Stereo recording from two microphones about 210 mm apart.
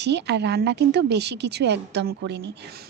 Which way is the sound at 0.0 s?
55° right (ahead or behind).